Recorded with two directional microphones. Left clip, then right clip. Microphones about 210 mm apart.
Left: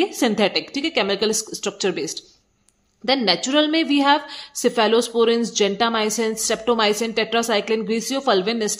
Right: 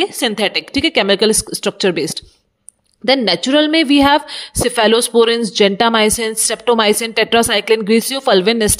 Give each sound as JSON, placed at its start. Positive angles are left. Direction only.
{"t": 0.0, "sound": "speech", "side_deg": -35}